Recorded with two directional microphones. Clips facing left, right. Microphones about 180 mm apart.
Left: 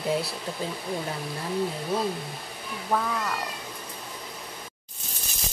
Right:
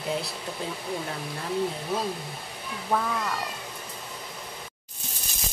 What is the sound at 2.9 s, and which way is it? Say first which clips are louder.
Cat: even; centre (ahead or behind).